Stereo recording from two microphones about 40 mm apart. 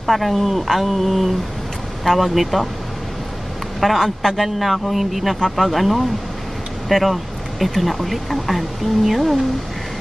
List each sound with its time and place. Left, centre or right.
0.0 s speech: centre
3.8 s speech: centre